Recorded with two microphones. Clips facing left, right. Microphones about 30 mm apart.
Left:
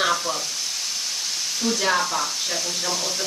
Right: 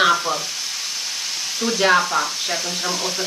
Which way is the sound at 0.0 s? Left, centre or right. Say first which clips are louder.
Right 5 dB; right.